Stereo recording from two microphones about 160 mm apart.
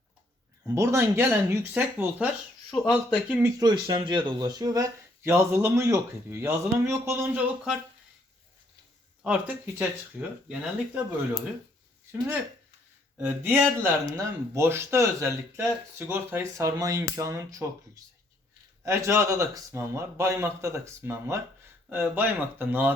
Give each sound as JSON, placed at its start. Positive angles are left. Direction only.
{"t": 0.7, "sound": "speech", "side_deg": -20}
{"t": 3.6, "sound": "speech", "side_deg": -25}
{"t": 9.2, "sound": "speech", "side_deg": -10}
{"t": 13.2, "sound": "speech", "side_deg": -15}
{"t": 18.9, "sound": "speech", "side_deg": -15}